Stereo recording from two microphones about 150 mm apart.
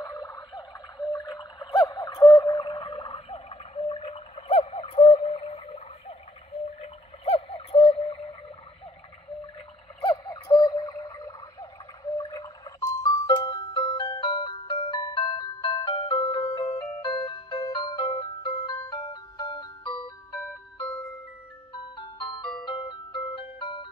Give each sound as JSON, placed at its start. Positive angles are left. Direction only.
{"t": 0.0, "sound": "a sound", "side_deg": 25}
{"t": 10.0, "sound": "tick-tock", "side_deg": 25}
{"t": 17.0, "sound": "music", "side_deg": 30}
{"t": 20.3, "sound": "music", "side_deg": 5}
{"t": 21.9, "sound": "music", "side_deg": 30}